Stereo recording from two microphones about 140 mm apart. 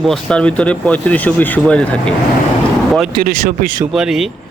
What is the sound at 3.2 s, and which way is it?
Speech, 90° right.